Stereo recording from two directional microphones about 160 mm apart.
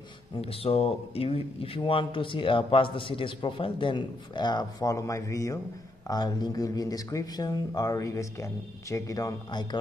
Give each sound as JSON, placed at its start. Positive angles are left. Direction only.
{"t": 0.4, "sound": "speech", "side_deg": 35}